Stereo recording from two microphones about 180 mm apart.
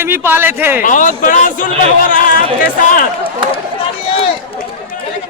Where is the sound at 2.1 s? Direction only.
50° left (ahead or behind).